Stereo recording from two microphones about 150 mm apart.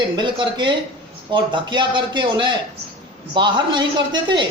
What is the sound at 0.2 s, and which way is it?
Speech, 30° right (ahead or behind).